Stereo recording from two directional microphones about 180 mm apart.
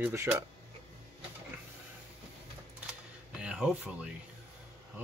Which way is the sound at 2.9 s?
5° right (ahead or behind).